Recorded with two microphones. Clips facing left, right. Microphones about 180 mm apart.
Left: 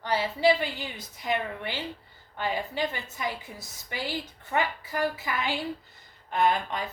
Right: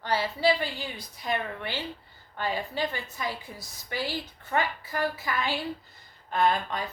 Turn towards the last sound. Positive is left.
turn(degrees=15)  # may be behind; listen again after turning